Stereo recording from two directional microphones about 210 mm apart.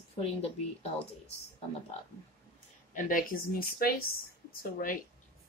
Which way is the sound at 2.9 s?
40° left (ahead or behind).